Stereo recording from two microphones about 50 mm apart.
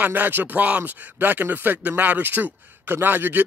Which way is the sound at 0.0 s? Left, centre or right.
Right.